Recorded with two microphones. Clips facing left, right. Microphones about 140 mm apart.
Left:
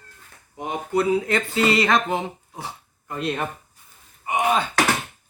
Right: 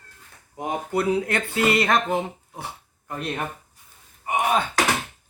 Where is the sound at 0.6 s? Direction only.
50° right (ahead or behind).